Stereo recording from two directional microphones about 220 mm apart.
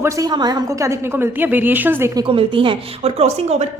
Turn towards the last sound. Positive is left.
turn(degrees=-30)  # may be behind; listen again after turning